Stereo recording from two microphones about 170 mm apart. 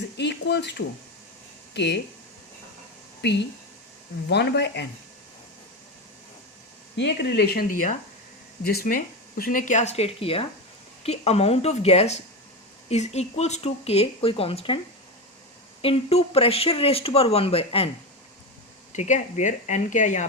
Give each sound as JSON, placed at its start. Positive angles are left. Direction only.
{"t": 0.2, "sound": "speech", "side_deg": 80}
{"t": 3.2, "sound": "speech", "side_deg": 90}
{"t": 6.9, "sound": "speech", "side_deg": 85}
{"t": 15.8, "sound": "speech", "side_deg": 35}
{"t": 18.9, "sound": "speech", "side_deg": 45}